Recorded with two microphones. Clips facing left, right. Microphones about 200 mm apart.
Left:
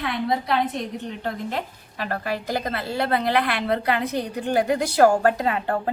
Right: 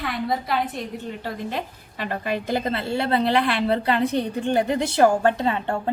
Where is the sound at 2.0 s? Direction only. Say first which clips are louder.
Right 2 dB; 25° right (ahead or behind).